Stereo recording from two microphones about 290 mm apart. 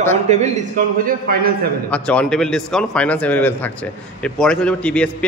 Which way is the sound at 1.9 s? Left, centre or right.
Centre.